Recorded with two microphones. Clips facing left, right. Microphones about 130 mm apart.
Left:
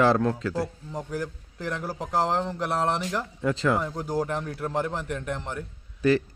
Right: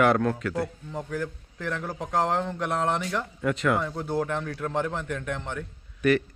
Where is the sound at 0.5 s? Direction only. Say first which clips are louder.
Even; 10° left (ahead or behind).